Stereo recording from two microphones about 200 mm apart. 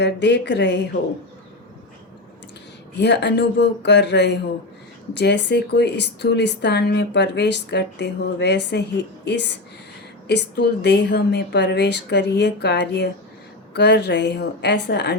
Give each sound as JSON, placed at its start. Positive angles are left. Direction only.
{"t": 0.0, "sound": "speech", "side_deg": 60}
{"t": 3.0, "sound": "speech", "side_deg": 60}